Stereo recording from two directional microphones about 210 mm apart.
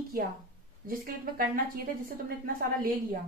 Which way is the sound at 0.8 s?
45° right (ahead or behind).